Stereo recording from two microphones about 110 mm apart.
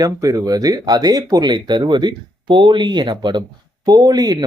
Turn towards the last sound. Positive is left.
turn(degrees=-35)  # may be behind; listen again after turning